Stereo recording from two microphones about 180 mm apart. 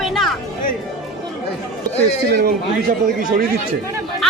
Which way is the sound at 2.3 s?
55° right (ahead or behind).